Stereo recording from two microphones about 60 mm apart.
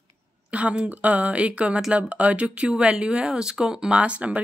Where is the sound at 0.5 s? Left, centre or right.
Right.